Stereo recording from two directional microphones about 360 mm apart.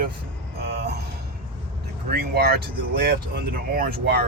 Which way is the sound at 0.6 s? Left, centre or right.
Right.